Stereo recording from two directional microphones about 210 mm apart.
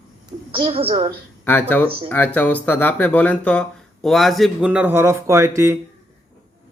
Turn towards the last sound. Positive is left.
turn(degrees=-15)  # may be behind; listen again after turning